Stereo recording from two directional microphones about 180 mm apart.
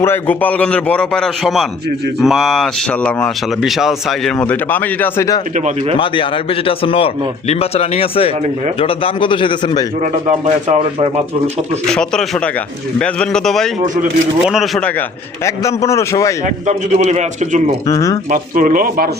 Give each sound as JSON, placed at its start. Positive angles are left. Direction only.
{"t": 0.0, "sound": "a man's voice", "side_deg": 10}
{"t": 5.5, "sound": "a man's voice", "side_deg": -40}
{"t": 6.0, "sound": "a man's voice", "side_deg": 30}
{"t": 10.0, "sound": "speech", "side_deg": -45}
{"t": 11.9, "sound": "speech", "side_deg": 5}
{"t": 13.8, "sound": "speech", "side_deg": -45}
{"t": 14.5, "sound": "speech", "side_deg": 0}
{"t": 15.4, "sound": "a man's voice", "side_deg": 15}
{"t": 16.6, "sound": "a man's voice", "side_deg": -40}
{"t": 17.8, "sound": "a man's voice", "side_deg": 20}
{"t": 18.3, "sound": "speech", "side_deg": -45}